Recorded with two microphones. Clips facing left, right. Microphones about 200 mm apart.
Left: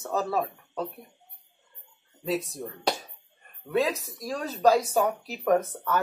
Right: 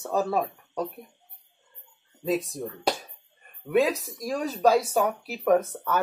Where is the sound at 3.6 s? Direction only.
10° right (ahead or behind).